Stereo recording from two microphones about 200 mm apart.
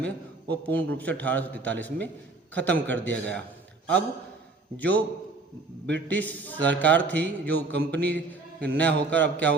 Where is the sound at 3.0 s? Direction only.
60° right (ahead or behind).